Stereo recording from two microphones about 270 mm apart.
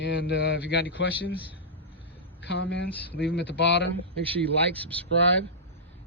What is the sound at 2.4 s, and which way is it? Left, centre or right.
A man's voice, left.